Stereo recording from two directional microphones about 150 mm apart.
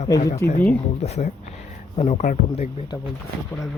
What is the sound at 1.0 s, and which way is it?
Speech, 45° left (ahead or behind).